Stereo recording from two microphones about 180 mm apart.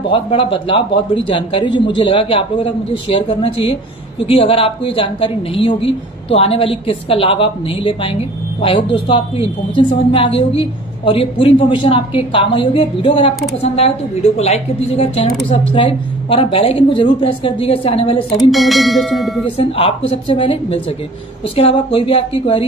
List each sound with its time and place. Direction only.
0.0 s a woman's voice: 30° left (ahead or behind)
18.5 s bell: centre (ahead or behind)
19.7 s a woman's voice: 30° left (ahead or behind)